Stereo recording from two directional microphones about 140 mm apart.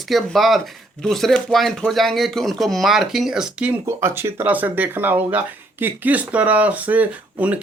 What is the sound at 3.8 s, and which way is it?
Speech, 15° right (ahead or behind).